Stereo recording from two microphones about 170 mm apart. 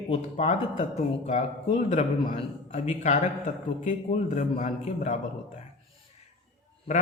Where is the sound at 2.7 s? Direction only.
40° left (ahead or behind).